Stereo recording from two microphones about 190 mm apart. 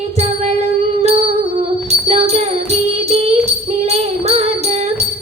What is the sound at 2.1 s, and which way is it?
Music, 35° right (ahead or behind).